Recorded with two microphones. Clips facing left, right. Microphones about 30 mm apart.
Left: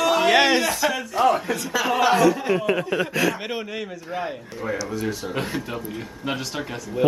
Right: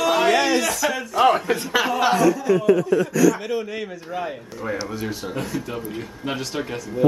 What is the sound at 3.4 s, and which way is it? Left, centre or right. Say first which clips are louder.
Speech: right 3 dB; left.